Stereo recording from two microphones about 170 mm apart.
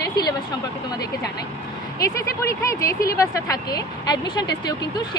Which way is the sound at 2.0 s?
20° left (ahead or behind).